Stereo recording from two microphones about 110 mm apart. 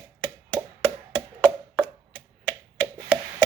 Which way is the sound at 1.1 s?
5° left (ahead or behind).